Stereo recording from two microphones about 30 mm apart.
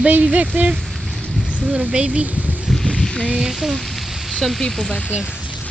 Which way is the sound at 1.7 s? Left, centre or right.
Right.